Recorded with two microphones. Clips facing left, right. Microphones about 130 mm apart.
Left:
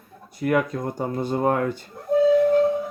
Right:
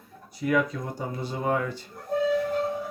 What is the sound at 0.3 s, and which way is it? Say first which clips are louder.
Speech: left 3 dB; 55° left (ahead or behind).